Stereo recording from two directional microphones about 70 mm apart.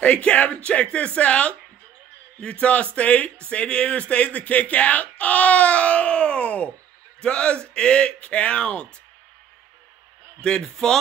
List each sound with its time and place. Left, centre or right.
0.0 s speech: centre
2.6 s a man's voice: centre
10.4 s speech: centre